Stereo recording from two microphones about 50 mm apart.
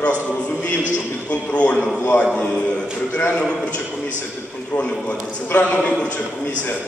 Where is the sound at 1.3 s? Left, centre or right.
Left.